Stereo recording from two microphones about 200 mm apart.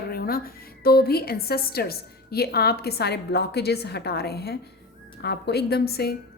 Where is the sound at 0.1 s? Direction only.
50° left (ahead or behind).